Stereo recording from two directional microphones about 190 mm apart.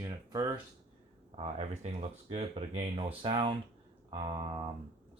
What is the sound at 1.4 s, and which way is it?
Speech, 35° right (ahead or behind).